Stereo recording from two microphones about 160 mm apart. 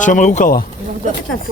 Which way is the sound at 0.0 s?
50° left (ahead or behind).